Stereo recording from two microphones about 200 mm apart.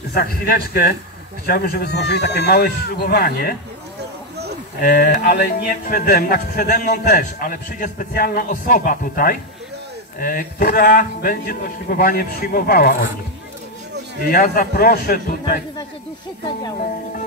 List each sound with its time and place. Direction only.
0.1 s speech: 50° left (ahead or behind)
4.7 s speech: 50° left (ahead or behind)
14.2 s speech: 45° left (ahead or behind)